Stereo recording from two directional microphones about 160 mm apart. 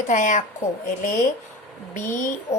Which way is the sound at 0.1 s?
50° left (ahead or behind).